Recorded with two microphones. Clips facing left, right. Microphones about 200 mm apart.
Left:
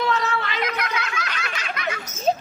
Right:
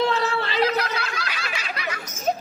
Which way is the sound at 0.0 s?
30° right (ahead or behind).